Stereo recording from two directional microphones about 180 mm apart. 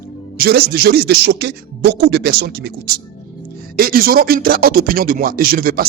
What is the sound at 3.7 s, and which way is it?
Speech, 55° right (ahead or behind).